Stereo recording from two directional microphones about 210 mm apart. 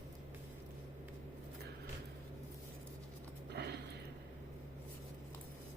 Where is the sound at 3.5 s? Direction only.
55° right (ahead or behind).